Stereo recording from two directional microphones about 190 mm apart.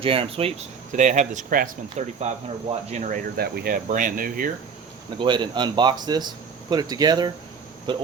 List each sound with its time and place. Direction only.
0.0 s speech: 30° right (ahead or behind)
3.3 s speech: 55° right (ahead or behind)
5.2 s speech: 25° right (ahead or behind)